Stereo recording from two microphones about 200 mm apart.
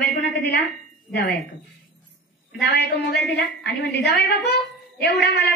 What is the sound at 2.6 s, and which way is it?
Speech, 60° left (ahead or behind).